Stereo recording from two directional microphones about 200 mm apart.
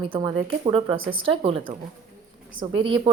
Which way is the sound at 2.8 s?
25° right (ahead or behind).